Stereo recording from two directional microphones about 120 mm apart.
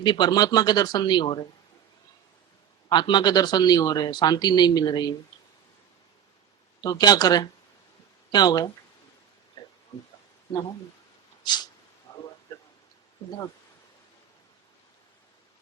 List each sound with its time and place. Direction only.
0.0 s speech: 40° left (ahead or behind)
2.9 s speech: 40° left (ahead or behind)
6.8 s speech: 35° left (ahead or behind)
9.6 s a sound: 35° left (ahead or behind)
11.4 s speech: 35° left (ahead or behind)
12.1 s a sound: 20° left (ahead or behind)